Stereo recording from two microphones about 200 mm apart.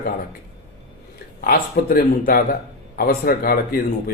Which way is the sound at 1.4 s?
45° left (ahead or behind).